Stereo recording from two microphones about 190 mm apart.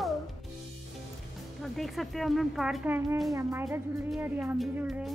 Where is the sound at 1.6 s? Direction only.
Centre (ahead or behind).